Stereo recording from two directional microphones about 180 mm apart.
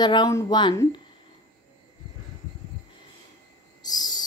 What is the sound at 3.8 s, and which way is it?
Owl, 20° left (ahead or behind).